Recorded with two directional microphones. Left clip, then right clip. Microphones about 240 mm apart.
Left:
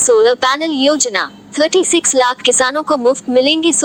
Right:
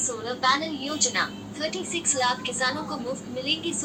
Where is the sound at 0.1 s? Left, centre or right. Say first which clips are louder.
Left 15 dB; left.